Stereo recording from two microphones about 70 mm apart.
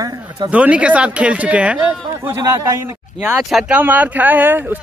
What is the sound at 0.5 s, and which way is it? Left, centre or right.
Speech, centre.